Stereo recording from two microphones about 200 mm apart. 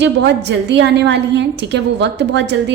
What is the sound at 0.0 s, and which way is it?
A woman's voice, 60° right (ahead or behind).